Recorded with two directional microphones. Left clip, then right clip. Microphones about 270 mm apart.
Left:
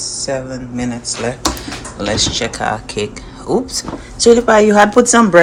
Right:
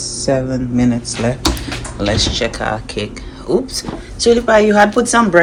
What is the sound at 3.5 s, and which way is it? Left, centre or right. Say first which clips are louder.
Speech: even; left.